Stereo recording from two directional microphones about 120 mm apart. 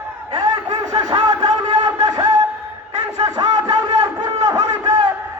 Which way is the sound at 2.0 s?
30° right (ahead or behind).